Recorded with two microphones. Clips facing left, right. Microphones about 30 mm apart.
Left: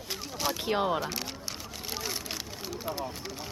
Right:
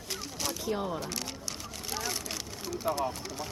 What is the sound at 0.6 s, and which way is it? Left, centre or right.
Speech, left.